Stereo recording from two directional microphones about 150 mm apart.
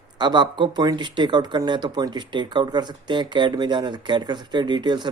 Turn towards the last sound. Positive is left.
turn(degrees=-30)  # may be behind; listen again after turning